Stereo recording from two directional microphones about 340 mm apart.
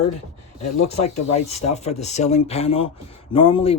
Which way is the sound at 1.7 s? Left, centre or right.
Centre.